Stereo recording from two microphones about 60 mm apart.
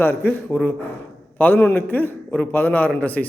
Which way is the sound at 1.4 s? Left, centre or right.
Left.